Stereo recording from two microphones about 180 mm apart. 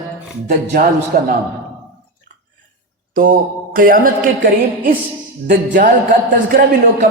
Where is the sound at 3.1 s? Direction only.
50° right (ahead or behind).